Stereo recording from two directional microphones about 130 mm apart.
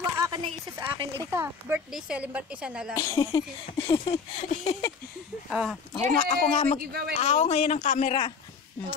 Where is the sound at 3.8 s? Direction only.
45° left (ahead or behind).